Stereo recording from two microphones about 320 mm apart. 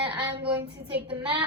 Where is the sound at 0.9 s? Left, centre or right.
Centre.